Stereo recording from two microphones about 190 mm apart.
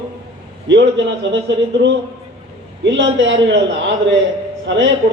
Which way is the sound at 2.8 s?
65° right (ahead or behind).